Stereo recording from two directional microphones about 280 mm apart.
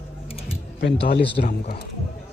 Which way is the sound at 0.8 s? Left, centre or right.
Left.